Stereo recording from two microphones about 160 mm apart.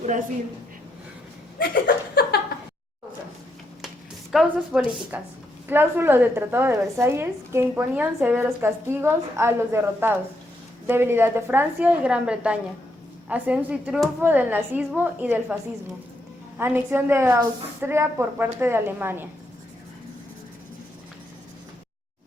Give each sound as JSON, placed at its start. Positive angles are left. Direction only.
{"t": 1.5, "sound": "chuckle", "side_deg": 65}
{"t": 4.3, "sound": "a woman's voice", "side_deg": 0}
{"t": 16.6, "sound": "a woman's voice", "side_deg": -15}